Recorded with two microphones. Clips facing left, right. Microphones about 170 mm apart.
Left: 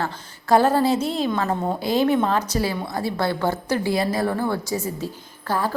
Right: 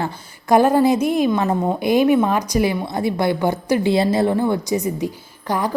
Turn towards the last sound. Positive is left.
turn(degrees=-15)  # may be behind; listen again after turning